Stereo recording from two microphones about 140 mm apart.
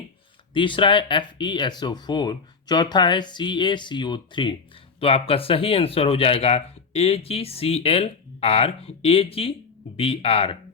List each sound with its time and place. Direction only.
0.5 s speech: 35° left (ahead or behind)